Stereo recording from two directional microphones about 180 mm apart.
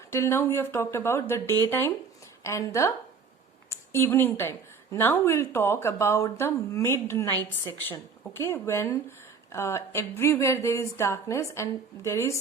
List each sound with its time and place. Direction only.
0.1 s a woman's voice: 15° left (ahead or behind)